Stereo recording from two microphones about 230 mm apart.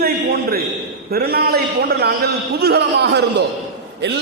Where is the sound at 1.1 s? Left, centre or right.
Right.